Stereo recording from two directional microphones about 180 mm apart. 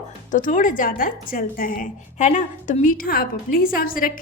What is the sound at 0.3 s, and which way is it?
A woman's voice, 45° left (ahead or behind).